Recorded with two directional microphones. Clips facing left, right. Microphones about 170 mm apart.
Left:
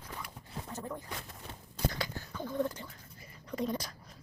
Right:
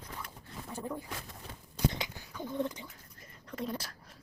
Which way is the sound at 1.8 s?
20° right (ahead or behind).